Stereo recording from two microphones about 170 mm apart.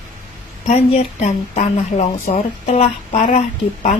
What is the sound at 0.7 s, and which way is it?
A woman's voice, 40° left (ahead or behind).